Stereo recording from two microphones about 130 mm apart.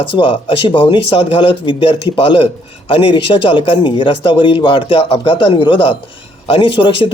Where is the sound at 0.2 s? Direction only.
40° left (ahead or behind).